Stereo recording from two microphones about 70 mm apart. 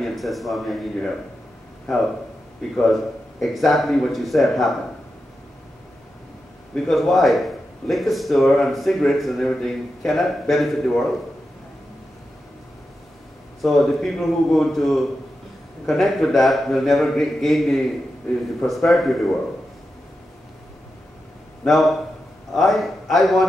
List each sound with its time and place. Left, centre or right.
0.0 s a man's voice: centre
2.7 s a man's voice: centre
6.9 s a man's voice: centre
13.6 s a man's voice: centre
21.6 s a man's voice: centre